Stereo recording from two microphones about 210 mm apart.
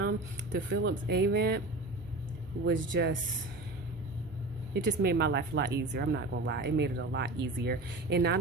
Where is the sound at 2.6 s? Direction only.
55° right (ahead or behind).